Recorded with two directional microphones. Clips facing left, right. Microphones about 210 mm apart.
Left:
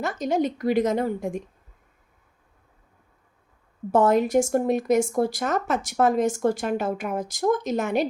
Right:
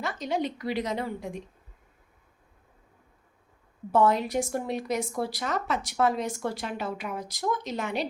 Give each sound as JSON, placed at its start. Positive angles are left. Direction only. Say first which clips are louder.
{"t": 0.0, "sound": "speech", "louder": "left 6 dB", "side_deg": 45}
{"t": 3.9, "sound": "speech", "louder": "left 5 dB", "side_deg": 45}